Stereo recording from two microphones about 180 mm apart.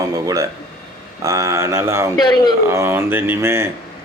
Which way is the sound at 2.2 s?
25° left (ahead or behind).